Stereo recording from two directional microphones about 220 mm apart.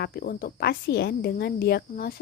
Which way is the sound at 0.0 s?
45° left (ahead or behind).